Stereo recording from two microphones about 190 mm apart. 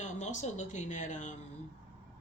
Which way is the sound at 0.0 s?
40° left (ahead or behind).